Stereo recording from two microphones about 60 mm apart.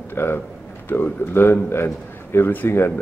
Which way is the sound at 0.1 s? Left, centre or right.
Left.